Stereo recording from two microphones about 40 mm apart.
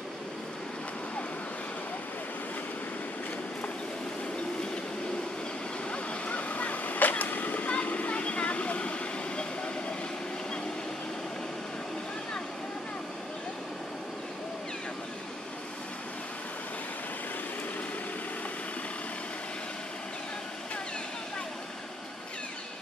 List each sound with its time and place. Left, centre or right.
5.9 s arrow: left